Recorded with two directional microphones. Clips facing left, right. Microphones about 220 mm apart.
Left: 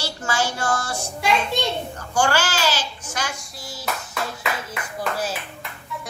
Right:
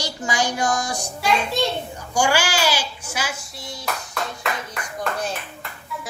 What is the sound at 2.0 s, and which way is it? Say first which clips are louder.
A child's voice: right 1 dB; 10° right (ahead or behind).